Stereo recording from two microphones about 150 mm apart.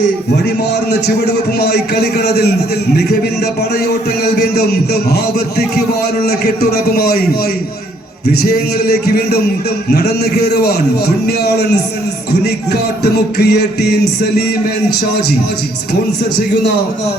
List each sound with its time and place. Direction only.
1.5 s a man's voice: 90° left
4.2 s a man's voice: 90° left
8.3 s a man's voice: 90° left
13.0 s a man's voice: 90° left